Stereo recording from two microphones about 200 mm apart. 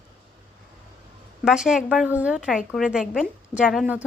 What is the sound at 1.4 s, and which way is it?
A woman's voice, 5° right (ahead or behind).